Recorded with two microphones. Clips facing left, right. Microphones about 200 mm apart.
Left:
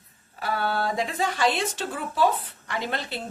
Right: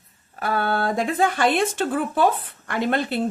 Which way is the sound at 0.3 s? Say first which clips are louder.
Right 4 dB; 55° right (ahead or behind).